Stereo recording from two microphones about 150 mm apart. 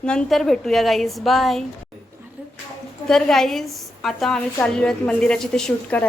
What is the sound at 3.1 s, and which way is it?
A woman's voice, 5° left (ahead or behind).